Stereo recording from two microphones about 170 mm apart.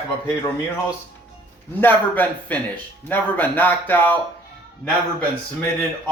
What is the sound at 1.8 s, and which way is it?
Speech, 10° left (ahead or behind).